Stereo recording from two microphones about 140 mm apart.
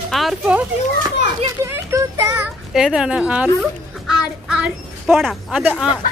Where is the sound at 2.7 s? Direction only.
5° right (ahead or behind).